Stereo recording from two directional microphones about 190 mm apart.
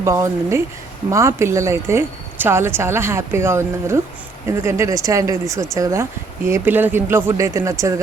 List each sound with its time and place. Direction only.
0.0 s a woman's voice: 15° right (ahead or behind)